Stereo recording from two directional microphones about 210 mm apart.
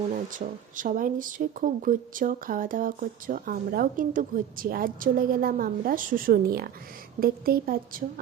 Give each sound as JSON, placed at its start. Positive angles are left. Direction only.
{"t": 0.3, "sound": "a woman's voice", "side_deg": -40}